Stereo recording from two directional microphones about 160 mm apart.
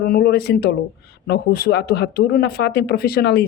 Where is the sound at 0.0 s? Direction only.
70° left (ahead or behind).